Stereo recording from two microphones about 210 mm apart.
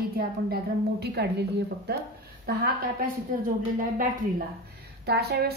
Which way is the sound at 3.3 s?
40° right (ahead or behind).